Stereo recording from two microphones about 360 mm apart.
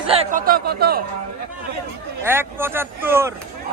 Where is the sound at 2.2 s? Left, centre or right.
Centre.